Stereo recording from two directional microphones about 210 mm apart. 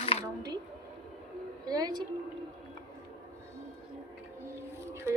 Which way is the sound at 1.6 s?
20° right (ahead or behind).